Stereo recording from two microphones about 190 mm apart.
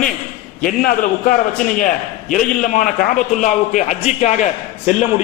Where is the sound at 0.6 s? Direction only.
45° left (ahead or behind).